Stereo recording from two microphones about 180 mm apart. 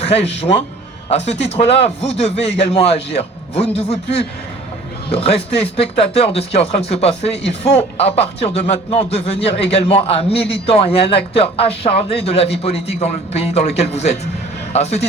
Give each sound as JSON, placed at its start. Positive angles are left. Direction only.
{"t": 0.0, "sound": "a man's voice", "side_deg": 35}